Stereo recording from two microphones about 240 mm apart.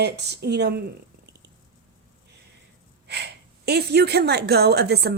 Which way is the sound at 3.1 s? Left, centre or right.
Right.